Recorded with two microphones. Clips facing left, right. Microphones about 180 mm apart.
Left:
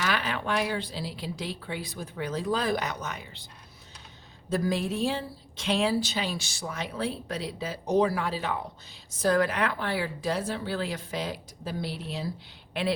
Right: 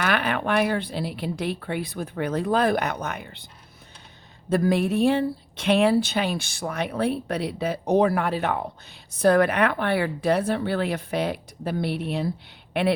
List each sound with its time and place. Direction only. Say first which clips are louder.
0.0 s speech: right 5 dB; 60° right (ahead or behind)
4.4 s speech: right 6 dB; 60° right (ahead or behind)